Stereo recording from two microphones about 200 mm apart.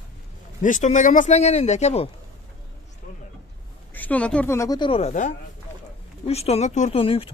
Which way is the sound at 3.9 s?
10° left (ahead or behind).